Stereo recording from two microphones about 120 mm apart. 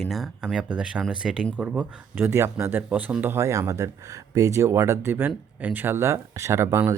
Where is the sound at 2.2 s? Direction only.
20° right (ahead or behind).